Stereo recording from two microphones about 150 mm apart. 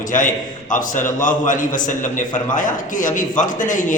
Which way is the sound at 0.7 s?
55° left (ahead or behind).